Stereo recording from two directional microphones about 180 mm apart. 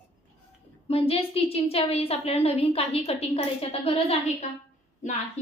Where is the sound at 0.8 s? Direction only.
35° left (ahead or behind).